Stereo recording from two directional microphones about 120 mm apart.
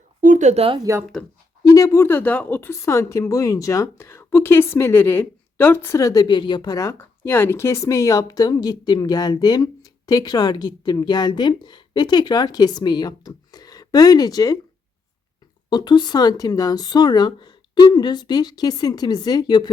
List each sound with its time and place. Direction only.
0.2 s speech: 90° right
0.8 s speech: 25° right (ahead or behind)
1.6 s speech: 30° left (ahead or behind)
6.2 s speech: 40° left (ahead or behind)
15.7 s speech: 35° left (ahead or behind)